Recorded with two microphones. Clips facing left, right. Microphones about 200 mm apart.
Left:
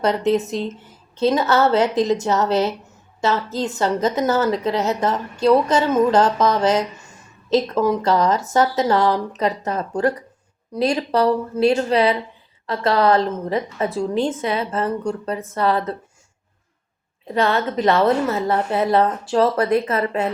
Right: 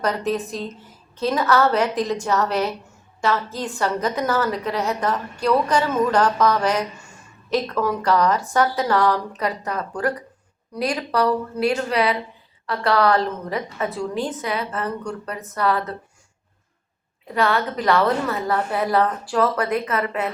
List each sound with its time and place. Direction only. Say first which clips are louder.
0.0 s a woman's voice: left 5 dB; 25° left (ahead or behind)
17.2 s a woman's voice: left 2 dB; 25° left (ahead or behind)